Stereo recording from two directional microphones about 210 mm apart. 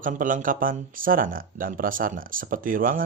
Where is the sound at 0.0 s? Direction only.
40° right (ahead or behind).